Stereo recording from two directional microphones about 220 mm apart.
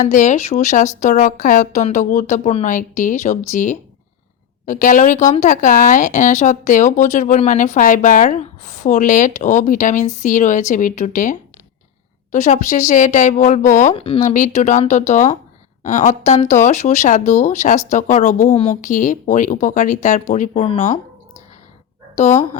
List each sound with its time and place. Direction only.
0.0 s speech: 35° left (ahead or behind)
22.1 s speech: 30° left (ahead or behind)